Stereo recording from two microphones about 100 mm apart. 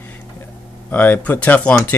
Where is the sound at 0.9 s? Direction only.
15° left (ahead or behind).